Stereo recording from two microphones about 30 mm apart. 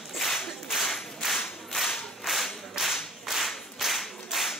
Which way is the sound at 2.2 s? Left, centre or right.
Centre.